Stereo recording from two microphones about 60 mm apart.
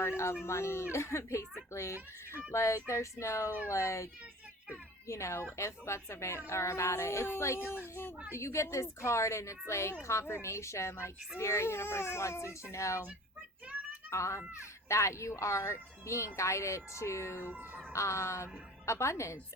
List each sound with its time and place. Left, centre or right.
0.0 s speech: left
8.4 s speech: left
14.1 s speech: left
17.3 s speech: right
17.9 s speech: left